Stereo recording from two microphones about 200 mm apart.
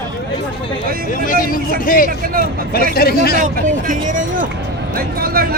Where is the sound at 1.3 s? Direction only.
45° left (ahead or behind).